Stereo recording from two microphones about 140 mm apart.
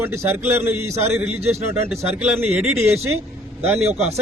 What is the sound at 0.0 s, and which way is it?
Speech, 15° right (ahead or behind).